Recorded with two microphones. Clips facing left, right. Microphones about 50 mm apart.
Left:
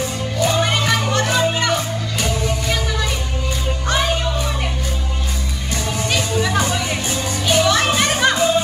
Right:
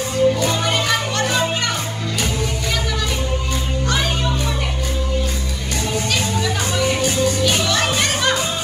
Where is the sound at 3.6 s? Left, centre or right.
Left.